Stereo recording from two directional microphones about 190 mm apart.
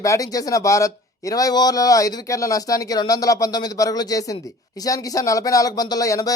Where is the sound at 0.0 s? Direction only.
15° left (ahead or behind).